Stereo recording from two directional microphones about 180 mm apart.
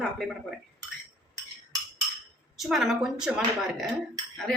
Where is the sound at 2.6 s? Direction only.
Centre (ahead or behind).